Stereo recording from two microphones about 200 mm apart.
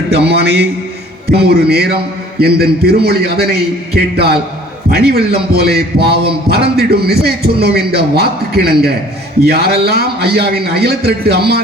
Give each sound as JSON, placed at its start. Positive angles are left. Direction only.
{"t": 0.1, "sound": "a man's voice", "side_deg": -55}